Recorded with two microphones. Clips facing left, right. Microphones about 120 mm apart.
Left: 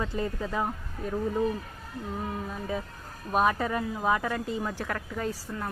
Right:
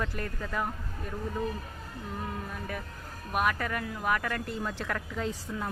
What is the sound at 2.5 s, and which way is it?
A woman's voice, 20° left (ahead or behind).